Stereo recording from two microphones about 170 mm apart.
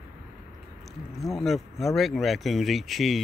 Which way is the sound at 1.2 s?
Centre (ahead or behind).